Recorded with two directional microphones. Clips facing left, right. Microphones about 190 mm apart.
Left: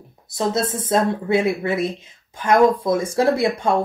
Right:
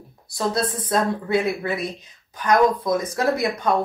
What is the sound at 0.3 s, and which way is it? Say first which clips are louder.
Speech: left 2 dB; 20° left (ahead or behind).